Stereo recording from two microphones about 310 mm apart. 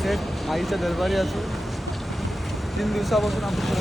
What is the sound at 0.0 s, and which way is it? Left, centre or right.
Speech, centre.